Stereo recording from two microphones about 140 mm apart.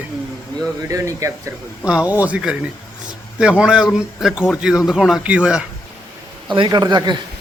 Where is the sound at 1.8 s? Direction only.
10° right (ahead or behind).